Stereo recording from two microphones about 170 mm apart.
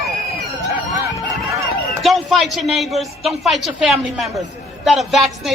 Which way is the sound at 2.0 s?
Centre (ahead or behind).